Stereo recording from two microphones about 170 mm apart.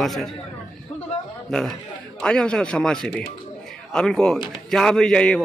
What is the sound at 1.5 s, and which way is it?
A man's voice, 5° left (ahead or behind).